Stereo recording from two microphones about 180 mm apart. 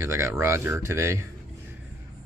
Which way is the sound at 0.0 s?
15° right (ahead or behind).